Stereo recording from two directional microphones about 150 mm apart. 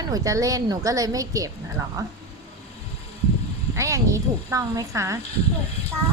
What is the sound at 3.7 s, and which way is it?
A woman's voice, 20° right (ahead or behind).